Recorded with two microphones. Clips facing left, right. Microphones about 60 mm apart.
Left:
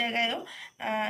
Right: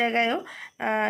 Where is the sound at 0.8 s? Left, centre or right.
Right.